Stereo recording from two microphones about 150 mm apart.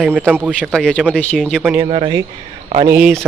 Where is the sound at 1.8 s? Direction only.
35° right (ahead or behind).